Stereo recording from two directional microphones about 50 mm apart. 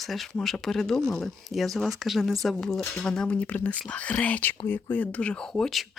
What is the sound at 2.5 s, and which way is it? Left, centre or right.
Speech, centre.